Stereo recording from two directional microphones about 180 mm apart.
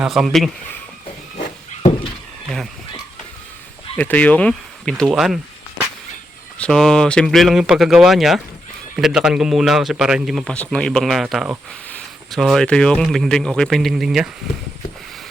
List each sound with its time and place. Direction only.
0.0 s speech: centre (ahead or behind)
3.9 s speech: 10° left (ahead or behind)
6.6 s speech: centre (ahead or behind)